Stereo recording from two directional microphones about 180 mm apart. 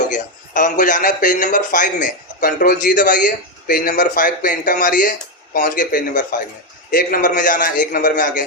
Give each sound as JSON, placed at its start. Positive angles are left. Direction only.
{"t": 0.1, "sound": "a man's voice", "side_deg": 45}